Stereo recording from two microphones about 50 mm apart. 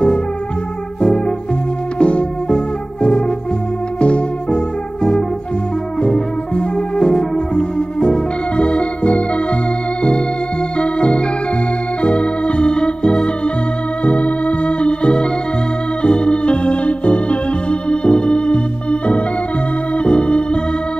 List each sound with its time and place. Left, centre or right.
2.0 s music: left
6.0 s music: centre
10.8 s organ: left